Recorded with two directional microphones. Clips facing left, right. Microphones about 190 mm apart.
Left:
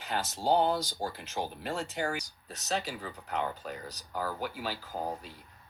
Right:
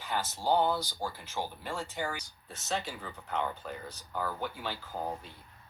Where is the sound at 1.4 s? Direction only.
30° left (ahead or behind).